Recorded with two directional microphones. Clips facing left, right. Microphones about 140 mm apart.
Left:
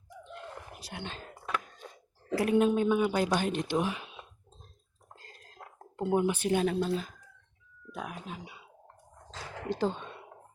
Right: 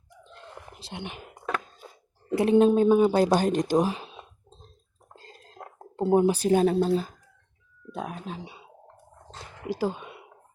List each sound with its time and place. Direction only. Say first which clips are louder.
0.3 s a sound: left 1 dB; 30° right (ahead or behind)
2.3 s speech: right 6 dB; 25° right (ahead or behind)
5.1 s drip: right 5 dB; 30° right (ahead or behind)
5.8 s speech: right 6 dB; 35° right (ahead or behind)
9.3 s a sound: left 1 dB; 90° left
9.6 s speech: right 2 dB; 10° right (ahead or behind)